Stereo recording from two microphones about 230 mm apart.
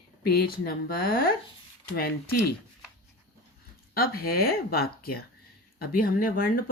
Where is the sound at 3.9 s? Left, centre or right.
Left.